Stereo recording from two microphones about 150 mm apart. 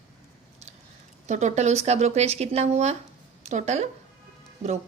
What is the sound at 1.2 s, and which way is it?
A woman's voice, 50° right (ahead or behind).